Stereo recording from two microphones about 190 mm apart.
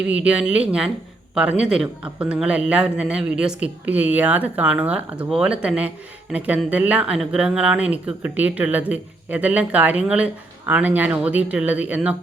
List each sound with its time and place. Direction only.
0.1 s speech: 5° right (ahead or behind)